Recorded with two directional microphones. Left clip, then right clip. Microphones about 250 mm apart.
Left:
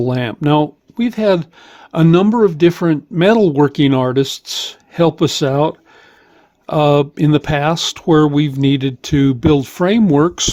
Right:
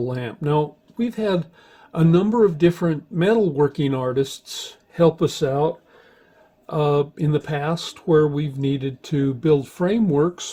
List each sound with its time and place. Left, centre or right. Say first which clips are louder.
0.0 s speech: left 8 dB; left